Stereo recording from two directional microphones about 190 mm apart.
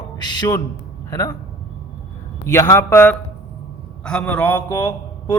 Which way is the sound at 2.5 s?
15° left (ahead or behind).